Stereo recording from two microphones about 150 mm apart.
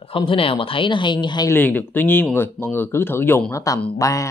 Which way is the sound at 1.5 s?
10° left (ahead or behind).